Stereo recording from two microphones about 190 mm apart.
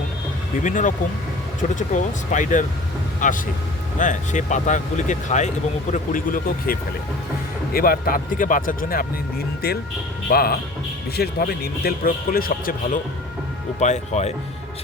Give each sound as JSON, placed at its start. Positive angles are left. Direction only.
{"t": 0.6, "sound": "speech", "side_deg": 40}
{"t": 13.7, "sound": "speech", "side_deg": 35}